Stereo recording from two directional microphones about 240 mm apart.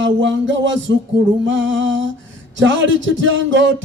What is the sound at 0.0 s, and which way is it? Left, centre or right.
Mantra, right.